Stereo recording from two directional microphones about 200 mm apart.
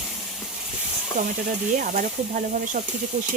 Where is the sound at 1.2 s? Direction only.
40° right (ahead or behind).